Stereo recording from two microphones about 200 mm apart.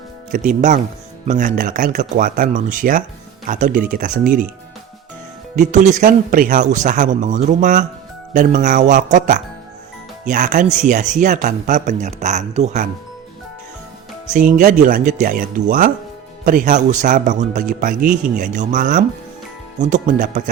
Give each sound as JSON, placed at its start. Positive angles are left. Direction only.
{"t": 0.3, "sound": "a man's voice", "side_deg": -40}
{"t": 5.5, "sound": "a man's voice", "side_deg": -35}
{"t": 14.3, "sound": "a man's voice", "side_deg": -40}